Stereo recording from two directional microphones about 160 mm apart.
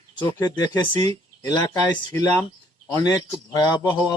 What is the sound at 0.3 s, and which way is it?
A man's voice, 25° left (ahead or behind).